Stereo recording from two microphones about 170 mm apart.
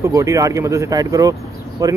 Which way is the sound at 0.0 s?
20° right (ahead or behind).